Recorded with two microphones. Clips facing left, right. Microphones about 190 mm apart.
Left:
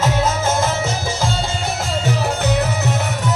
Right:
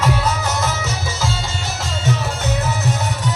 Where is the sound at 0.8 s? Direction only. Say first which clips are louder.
Left 3 dB; 50° left (ahead or behind).